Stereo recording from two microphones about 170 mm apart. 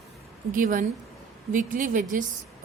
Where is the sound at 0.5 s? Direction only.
55° right (ahead or behind).